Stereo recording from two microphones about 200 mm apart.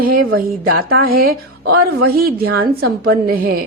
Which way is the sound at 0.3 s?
90° right.